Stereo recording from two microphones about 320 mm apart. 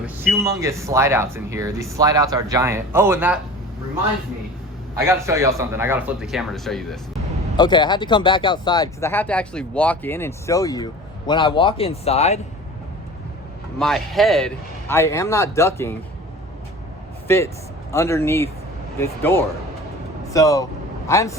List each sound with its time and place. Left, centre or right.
0.0 s speech: centre
4.9 s speech: centre
7.5 s speech: centre
13.7 s speech: centre
17.2 s speech: centre